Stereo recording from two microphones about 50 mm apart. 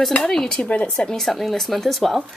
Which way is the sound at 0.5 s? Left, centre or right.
Left.